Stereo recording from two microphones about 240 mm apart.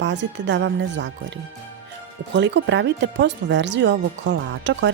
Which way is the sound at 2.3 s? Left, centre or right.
Right.